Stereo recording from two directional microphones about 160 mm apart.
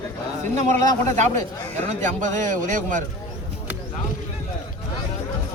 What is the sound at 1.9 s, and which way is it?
A man's voice, 50° right (ahead or behind).